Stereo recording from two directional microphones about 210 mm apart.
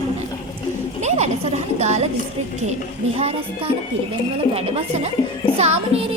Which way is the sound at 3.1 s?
30° right (ahead or behind).